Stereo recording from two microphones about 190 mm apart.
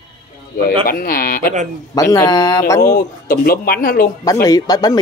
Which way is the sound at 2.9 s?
50° left (ahead or behind).